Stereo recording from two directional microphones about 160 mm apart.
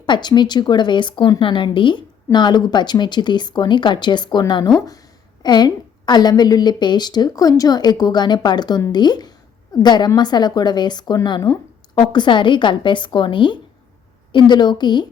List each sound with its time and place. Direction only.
0.0 s a woman's voice: 25° left (ahead or behind)